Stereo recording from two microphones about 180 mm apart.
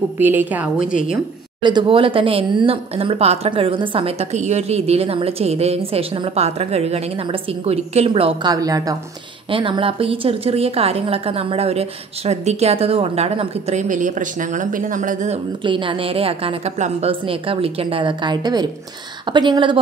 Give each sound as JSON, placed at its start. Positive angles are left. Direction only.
{"t": 0.2, "sound": "a woman's voice", "side_deg": -10}
{"t": 1.6, "sound": "a woman's voice", "side_deg": -25}
{"t": 15.6, "sound": "a woman's voice", "side_deg": -25}